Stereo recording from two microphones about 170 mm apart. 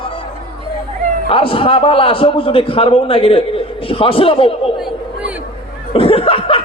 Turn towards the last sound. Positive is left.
turn(degrees=35)  # may be behind; listen again after turning